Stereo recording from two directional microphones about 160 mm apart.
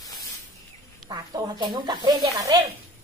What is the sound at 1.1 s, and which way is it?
Snake, 25° right (ahead or behind).